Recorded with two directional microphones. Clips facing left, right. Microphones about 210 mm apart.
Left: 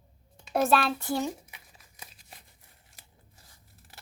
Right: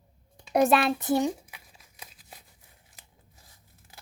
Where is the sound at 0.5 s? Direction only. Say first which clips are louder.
Right 3 dB; 15° right (ahead or behind).